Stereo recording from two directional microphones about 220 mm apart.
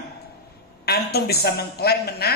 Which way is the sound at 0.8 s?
45° left (ahead or behind).